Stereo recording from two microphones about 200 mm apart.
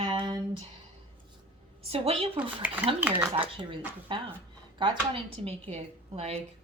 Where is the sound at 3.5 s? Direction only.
25° right (ahead or behind).